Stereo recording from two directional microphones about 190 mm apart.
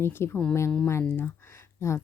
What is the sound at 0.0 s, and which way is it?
Speech, 10° left (ahead or behind).